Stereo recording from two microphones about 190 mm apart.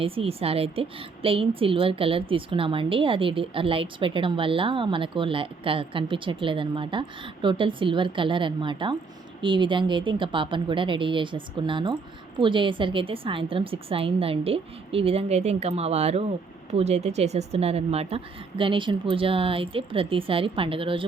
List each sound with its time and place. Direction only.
0.0 s a woman's voice: 30° right (ahead or behind)